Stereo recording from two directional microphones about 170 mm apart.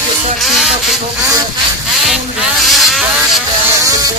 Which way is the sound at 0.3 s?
Centre (ahead or behind).